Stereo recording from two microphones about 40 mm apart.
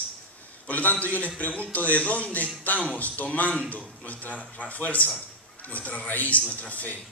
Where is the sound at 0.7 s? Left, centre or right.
Left.